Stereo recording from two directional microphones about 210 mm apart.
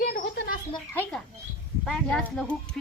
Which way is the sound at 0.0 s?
45° left (ahead or behind).